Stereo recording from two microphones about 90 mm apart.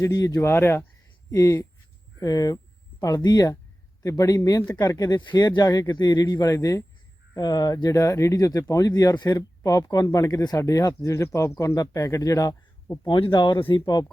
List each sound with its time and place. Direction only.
0.0 s speech: 40° left (ahead or behind)
0.5 s speech: 25° left (ahead or behind)
13.1 s speech: 60° left (ahead or behind)
13.8 s speech: 45° left (ahead or behind)